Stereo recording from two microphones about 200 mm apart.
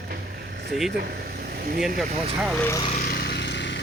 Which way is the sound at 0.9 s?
50° right (ahead or behind).